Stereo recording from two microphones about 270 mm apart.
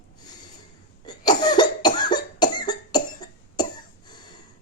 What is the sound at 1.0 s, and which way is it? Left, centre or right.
Cough, centre.